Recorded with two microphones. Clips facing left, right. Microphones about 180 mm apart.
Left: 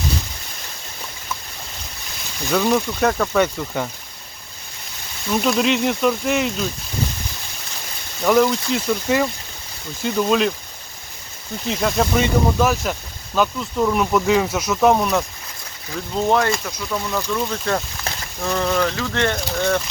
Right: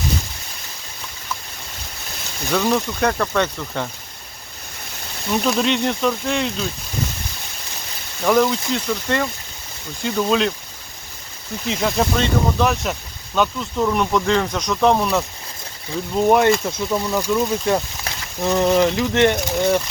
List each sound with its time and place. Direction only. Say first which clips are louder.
2.5 s speech: left 1 dB; 5° left (ahead or behind)
5.3 s speech: left 1 dB; centre (ahead or behind)
8.2 s speech: left 1 dB; centre (ahead or behind)
11.7 s speech: left 1 dB; centre (ahead or behind)
16.6 s speech: right 4 dB; 25° right (ahead or behind)